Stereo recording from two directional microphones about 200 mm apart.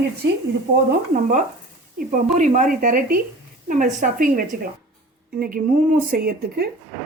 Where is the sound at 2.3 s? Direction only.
40° right (ahead or behind).